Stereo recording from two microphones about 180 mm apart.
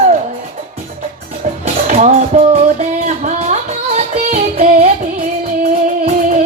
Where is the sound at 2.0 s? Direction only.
35° right (ahead or behind).